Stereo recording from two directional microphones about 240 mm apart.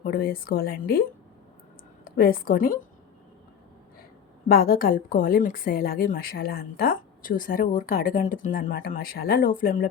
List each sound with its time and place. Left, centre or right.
0.0 s a woman's voice: left
2.0 s a woman's voice: left
4.4 s a woman's voice: left